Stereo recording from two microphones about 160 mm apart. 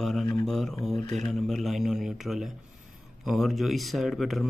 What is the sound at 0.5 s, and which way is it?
Mantra, centre (ahead or behind).